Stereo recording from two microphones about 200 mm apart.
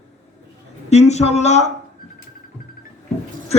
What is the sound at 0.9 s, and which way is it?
Speech, 35° left (ahead or behind).